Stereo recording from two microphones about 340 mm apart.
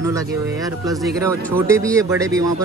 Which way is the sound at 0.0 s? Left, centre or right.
Centre.